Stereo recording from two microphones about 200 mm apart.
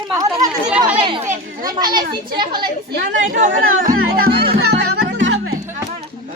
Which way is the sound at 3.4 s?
45° right (ahead or behind).